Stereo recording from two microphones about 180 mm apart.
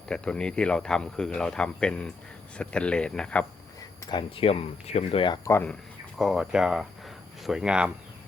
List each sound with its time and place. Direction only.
0.1 s speech: 5° left (ahead or behind)
4.1 s speech: 30° left (ahead or behind)
5.5 s speech: 15° left (ahead or behind)
6.1 s speech: centre (ahead or behind)